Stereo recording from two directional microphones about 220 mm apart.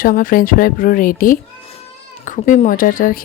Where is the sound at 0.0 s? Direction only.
40° left (ahead or behind).